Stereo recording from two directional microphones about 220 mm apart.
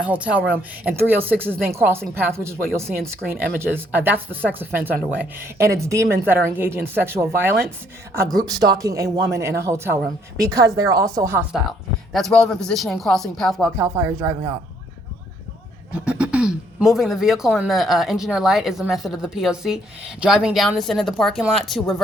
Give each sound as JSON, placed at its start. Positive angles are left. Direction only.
{"t": 0.0, "sound": "a woman's voice", "side_deg": -5}
{"t": 12.1, "sound": "speech", "side_deg": 0}
{"t": 13.7, "sound": "a woman's voice", "side_deg": -15}
{"t": 15.9, "sound": "speech", "side_deg": -5}